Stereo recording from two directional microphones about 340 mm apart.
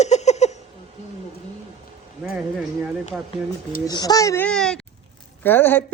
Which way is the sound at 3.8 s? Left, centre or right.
Centre.